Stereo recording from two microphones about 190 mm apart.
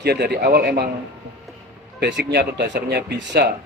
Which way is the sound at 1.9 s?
60° right (ahead or behind).